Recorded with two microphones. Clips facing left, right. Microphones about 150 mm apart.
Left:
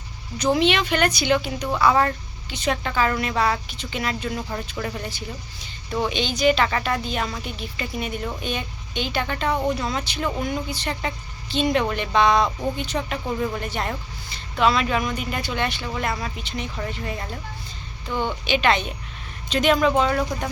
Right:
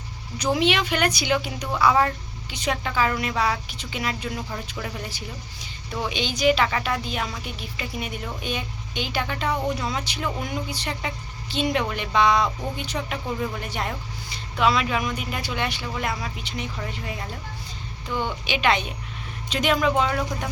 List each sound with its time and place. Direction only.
0.3 s speech: 10° right (ahead or behind)
18.1 s a woman's voice: 15° left (ahead or behind)
18.4 s speech: 10° right (ahead or behind)